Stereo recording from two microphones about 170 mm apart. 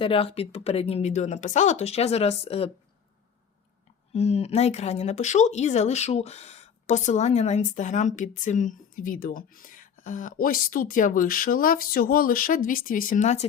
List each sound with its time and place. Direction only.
0.0 s speech: 35° left (ahead or behind)
4.1 s speech: 40° left (ahead or behind)